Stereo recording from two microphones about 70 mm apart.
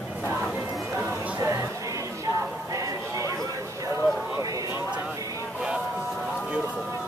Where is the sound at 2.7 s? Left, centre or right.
Right.